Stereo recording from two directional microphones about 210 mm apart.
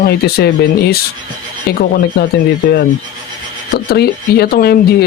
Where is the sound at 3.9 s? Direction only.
50° left (ahead or behind).